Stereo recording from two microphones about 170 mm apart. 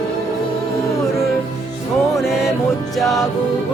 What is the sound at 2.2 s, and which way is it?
Music, 5° right (ahead or behind).